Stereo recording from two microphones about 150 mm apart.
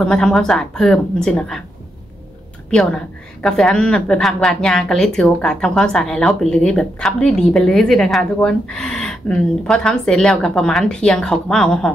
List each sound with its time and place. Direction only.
0.0 s a woman's voice: 5° left (ahead or behind)
2.7 s a woman's voice: 5° left (ahead or behind)